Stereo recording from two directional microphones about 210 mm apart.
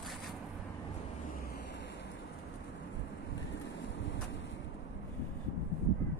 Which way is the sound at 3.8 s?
60° left (ahead or behind).